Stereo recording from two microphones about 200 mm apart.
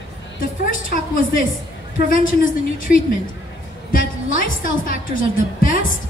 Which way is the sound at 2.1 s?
40° left (ahead or behind).